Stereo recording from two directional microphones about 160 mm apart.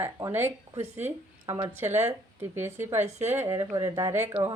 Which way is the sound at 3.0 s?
45° right (ahead or behind).